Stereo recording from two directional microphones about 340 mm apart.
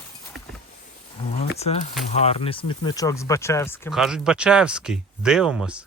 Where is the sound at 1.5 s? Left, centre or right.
Centre.